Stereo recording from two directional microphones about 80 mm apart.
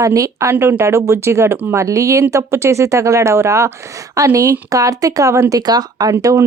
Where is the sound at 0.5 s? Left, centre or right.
Right.